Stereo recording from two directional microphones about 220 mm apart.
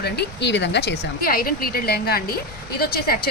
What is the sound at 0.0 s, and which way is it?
A woman's voice, 50° left (ahead or behind).